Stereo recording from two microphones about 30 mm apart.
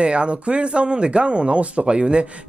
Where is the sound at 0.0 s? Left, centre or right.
Right.